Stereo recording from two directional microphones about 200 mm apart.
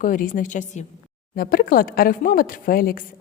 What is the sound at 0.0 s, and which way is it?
A woman's voice, 40° left (ahead or behind).